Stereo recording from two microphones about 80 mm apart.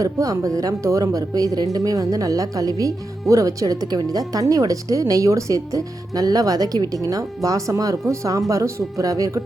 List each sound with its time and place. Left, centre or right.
0.0 s speech: right